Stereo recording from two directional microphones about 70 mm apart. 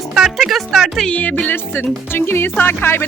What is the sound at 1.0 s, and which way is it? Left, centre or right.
A woman's voice, left.